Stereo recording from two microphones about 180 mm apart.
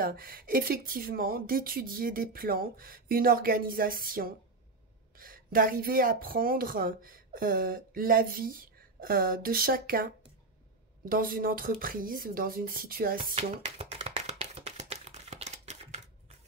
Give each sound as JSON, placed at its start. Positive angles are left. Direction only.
{"t": 0.0, "sound": "speech", "side_deg": -55}
{"t": 13.2, "sound": "shuffling cards", "side_deg": -30}